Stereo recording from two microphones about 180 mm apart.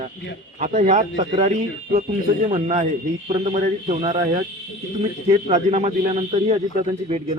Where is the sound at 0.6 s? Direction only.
45° right (ahead or behind).